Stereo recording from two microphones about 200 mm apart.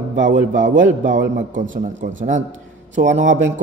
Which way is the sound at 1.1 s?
65° right (ahead or behind).